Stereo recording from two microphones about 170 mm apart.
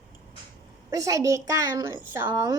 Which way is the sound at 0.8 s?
20° right (ahead or behind).